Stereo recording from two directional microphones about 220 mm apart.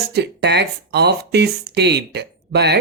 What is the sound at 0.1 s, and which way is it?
Speech, 50° right (ahead or behind).